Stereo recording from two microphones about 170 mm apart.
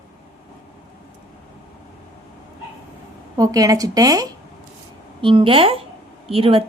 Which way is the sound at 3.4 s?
20° right (ahead or behind).